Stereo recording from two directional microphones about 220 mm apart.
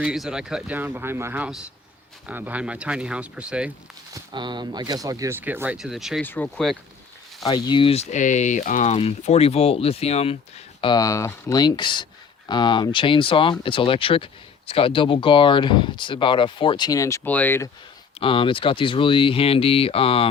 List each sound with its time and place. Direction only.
0.0 s speech: 5° right (ahead or behind)
4.1 s speech: 20° right (ahead or behind); by 6.7 s 5° left (ahead or behind)
7.4 s speech: 20° left (ahead or behind)
18.2 s speech: 25° left (ahead or behind)